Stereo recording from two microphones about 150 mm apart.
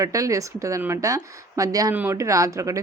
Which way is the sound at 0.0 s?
20° right (ahead or behind).